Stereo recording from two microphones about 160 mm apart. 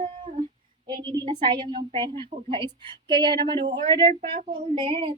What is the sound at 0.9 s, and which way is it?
A woman's voice, 25° right (ahead or behind).